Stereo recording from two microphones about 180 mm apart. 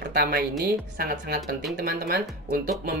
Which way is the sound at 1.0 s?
60° right (ahead or behind).